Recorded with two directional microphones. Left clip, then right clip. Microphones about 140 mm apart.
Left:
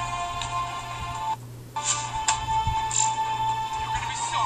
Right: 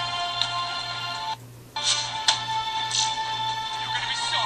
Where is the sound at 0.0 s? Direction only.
35° right (ahead or behind).